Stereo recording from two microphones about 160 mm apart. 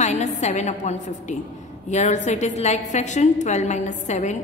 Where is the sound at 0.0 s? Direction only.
45° left (ahead or behind).